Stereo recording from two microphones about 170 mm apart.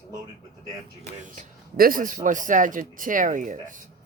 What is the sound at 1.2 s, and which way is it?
A man's voice, 50° right (ahead or behind).